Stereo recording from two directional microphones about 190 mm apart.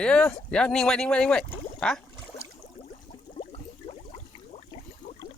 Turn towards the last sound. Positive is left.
turn(degrees=30)  # may be behind; listen again after turning